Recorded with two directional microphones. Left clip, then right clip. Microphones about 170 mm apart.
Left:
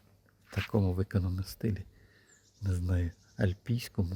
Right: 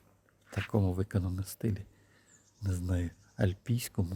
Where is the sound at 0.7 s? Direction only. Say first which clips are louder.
Even; 5° right (ahead or behind).